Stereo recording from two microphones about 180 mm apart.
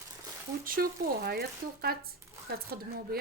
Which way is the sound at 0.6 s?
55° right (ahead or behind).